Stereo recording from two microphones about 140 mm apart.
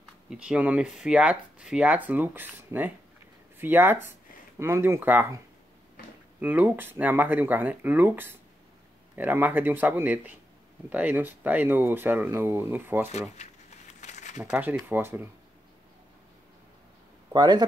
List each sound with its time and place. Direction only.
0.3 s speech: 5° right (ahead or behind)
6.4 s speech: 15° right (ahead or behind)
14.0 s a sound: 60° left (ahead or behind)
14.4 s speech: 10° right (ahead or behind)
17.3 s speech: 30° right (ahead or behind)